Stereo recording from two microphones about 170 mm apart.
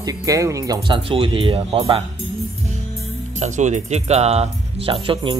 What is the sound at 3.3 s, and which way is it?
Speech, 45° right (ahead or behind).